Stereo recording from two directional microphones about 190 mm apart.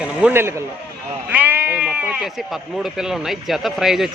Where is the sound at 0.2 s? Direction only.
10° right (ahead or behind).